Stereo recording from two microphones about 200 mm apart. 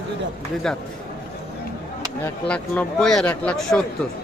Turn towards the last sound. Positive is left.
turn(degrees=5)  # may be behind; listen again after turning